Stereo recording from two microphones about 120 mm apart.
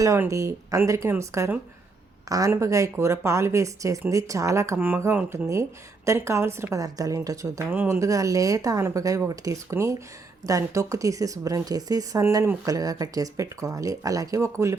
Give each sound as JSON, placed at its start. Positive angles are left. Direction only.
{"t": 0.0, "sound": "a woman's voice", "side_deg": -25}
{"t": 2.5, "sound": "a woman's voice", "side_deg": -25}